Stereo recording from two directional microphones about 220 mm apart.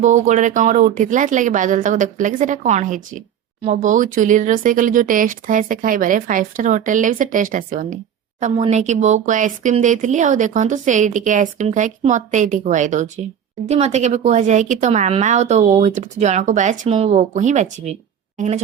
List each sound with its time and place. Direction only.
0.0 s a woman's voice: 35° right (ahead or behind)